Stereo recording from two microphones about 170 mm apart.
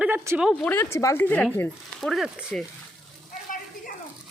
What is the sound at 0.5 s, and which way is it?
Speech, 10° left (ahead or behind).